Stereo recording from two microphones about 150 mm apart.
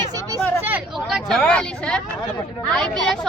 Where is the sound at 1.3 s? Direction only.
5° left (ahead or behind).